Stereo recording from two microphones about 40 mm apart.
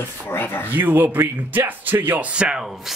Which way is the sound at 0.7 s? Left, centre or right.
Right.